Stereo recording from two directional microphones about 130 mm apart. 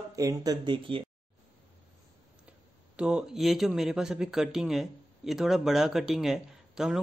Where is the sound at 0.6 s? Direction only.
40° right (ahead or behind).